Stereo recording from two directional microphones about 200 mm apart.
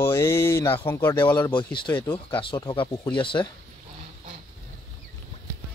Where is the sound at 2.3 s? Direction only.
25° left (ahead or behind).